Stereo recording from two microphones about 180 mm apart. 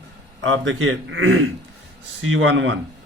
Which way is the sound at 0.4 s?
90° right.